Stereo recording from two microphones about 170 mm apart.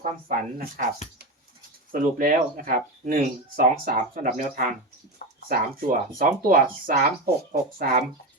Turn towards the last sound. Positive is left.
turn(degrees=-55)  # may be behind; listen again after turning